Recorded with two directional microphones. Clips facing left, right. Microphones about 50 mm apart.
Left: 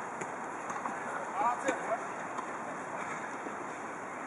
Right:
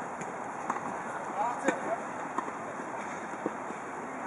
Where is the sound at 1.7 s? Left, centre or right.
Centre.